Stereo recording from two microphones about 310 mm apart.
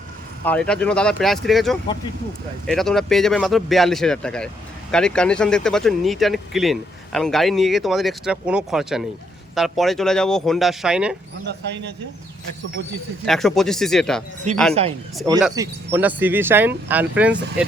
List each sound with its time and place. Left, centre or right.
0.4 s speech: centre
11.4 s speech: right
13.2 s speech: centre
14.7 s a man's voice: centre
15.4 s speech: centre